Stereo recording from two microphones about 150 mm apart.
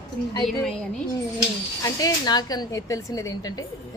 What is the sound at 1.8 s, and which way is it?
Speech, 25° left (ahead or behind).